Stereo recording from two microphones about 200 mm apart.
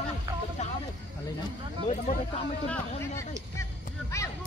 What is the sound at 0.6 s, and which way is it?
Vehicle, 35° left (ahead or behind).